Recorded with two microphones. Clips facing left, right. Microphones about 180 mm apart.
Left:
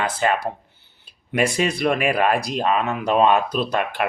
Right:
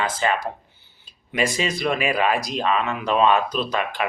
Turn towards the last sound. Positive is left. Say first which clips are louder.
# left 2 dB
turn(degrees=60)  # may be behind; listen again after turning